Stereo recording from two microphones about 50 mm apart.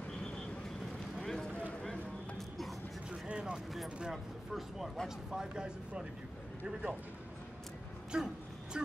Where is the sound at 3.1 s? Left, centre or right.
Right.